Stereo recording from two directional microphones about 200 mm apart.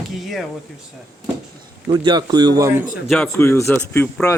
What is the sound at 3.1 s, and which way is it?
A man's voice, 5° left (ahead or behind).